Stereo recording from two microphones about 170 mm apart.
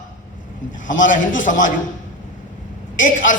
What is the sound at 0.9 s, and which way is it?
Speech, 50° left (ahead or behind).